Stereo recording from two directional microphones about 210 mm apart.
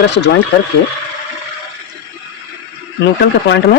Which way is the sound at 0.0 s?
55° left (ahead or behind).